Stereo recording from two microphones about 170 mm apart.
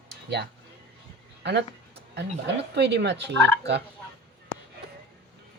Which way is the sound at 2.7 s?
85° right.